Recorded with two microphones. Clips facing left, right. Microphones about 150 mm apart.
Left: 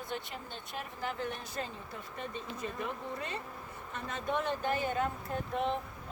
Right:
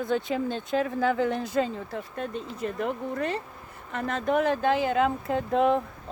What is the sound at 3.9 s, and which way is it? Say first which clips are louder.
Speech: right 10 dB; 75° right (ahead or behind).